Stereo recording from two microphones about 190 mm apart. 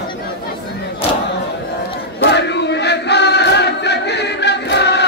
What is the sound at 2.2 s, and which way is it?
Chant, 65° left (ahead or behind).